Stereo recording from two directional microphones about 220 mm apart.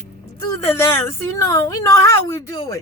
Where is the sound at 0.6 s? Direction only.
10° left (ahead or behind).